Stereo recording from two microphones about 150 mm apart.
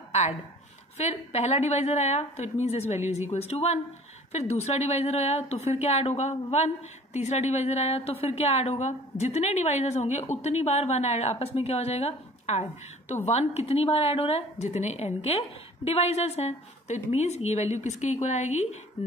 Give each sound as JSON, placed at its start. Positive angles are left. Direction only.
{"t": 0.9, "sound": "a woman's voice", "side_deg": 45}